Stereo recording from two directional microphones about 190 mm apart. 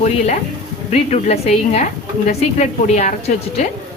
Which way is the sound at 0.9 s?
35° left (ahead or behind).